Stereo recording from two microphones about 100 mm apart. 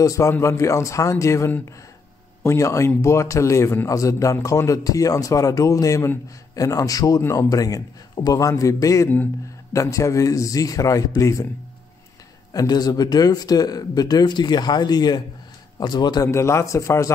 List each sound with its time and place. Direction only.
0.0 s a man's voice: 35° left (ahead or behind)
12.5 s speech: 40° left (ahead or behind)
16.3 s a man's voice: 30° left (ahead or behind)